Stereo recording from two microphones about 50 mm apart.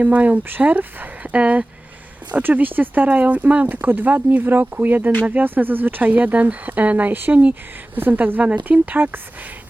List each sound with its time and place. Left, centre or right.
0.0 s speech: right